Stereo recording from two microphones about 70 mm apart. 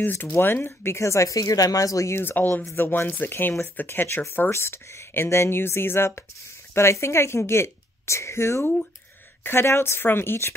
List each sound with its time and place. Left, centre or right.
0.0 s speech: left
2.1 s speech: left
4.5 s a woman's voice: left